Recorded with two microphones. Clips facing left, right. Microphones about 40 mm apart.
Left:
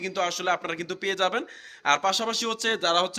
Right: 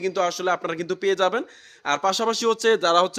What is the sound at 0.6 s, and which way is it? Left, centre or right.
Speech, left.